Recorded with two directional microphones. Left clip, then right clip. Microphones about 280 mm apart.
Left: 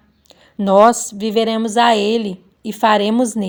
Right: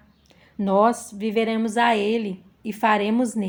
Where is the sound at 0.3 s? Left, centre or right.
Left.